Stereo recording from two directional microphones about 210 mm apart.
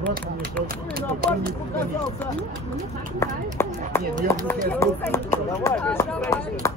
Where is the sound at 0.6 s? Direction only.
45° right (ahead or behind).